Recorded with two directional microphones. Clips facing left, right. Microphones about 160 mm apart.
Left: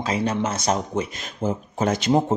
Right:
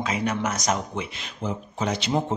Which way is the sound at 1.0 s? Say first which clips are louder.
Left 6 dB; 45° left (ahead or behind).